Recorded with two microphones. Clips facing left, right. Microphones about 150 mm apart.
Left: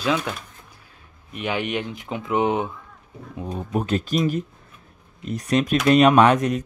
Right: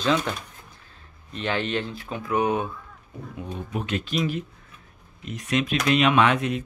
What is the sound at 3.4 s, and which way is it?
Speech, 35° left (ahead or behind).